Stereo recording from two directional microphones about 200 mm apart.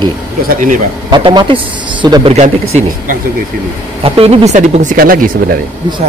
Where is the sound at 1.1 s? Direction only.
25° right (ahead or behind).